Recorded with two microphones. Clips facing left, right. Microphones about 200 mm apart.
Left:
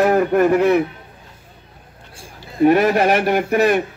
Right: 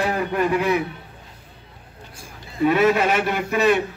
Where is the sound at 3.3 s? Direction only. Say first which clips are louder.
Left 3 dB; 55° left (ahead or behind).